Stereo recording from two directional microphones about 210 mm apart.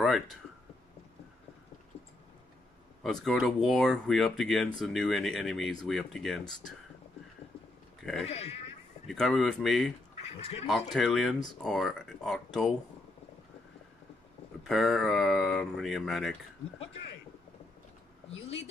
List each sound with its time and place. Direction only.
3.0 s speech: centre (ahead or behind)
8.0 s speech: centre (ahead or behind)
8.3 s speech: 30° left (ahead or behind)
9.0 s speech: centre (ahead or behind)
10.3 s speech: 30° left (ahead or behind)
10.7 s speech: centre (ahead or behind)
14.6 s speech: centre (ahead or behind)